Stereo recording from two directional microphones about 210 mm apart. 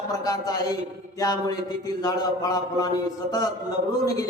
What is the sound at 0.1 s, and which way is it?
A man's voice, 15° left (ahead or behind).